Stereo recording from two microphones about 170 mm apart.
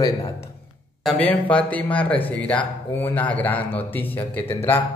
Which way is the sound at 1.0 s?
10° left (ahead or behind).